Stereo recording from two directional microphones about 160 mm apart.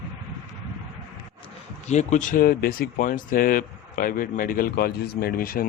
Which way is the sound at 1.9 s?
45° left (ahead or behind).